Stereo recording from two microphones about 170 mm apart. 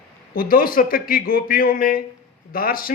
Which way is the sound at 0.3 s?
55° left (ahead or behind).